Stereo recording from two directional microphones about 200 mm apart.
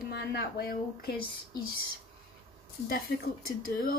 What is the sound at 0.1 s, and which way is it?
Speech, 50° left (ahead or behind).